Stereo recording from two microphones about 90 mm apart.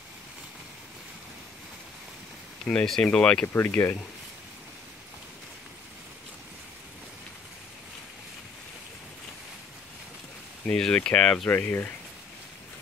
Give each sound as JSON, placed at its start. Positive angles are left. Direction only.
{"t": 2.6, "sound": "speech", "side_deg": 5}
{"t": 3.5, "sound": "speech", "side_deg": 25}
{"t": 10.7, "sound": "speech", "side_deg": 10}
{"t": 11.5, "sound": "speech", "side_deg": 20}